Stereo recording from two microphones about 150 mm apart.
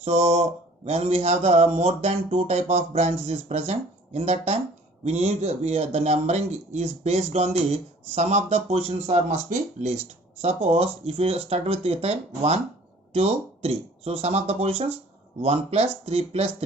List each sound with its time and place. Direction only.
0.0 s speech: 45° right (ahead or behind)